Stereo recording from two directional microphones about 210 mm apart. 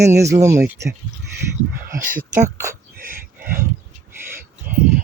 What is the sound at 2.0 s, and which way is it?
Speech, 40° right (ahead or behind).